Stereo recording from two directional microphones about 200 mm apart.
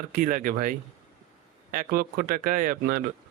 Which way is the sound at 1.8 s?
45° right (ahead or behind).